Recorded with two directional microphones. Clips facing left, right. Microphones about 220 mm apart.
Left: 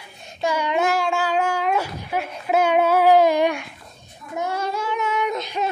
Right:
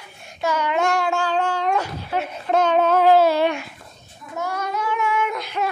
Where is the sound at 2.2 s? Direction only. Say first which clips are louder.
Even; 5° left (ahead or behind).